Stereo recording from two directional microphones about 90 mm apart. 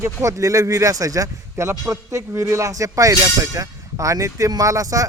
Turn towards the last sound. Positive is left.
turn(degrees=-40)  # may be behind; listen again after turning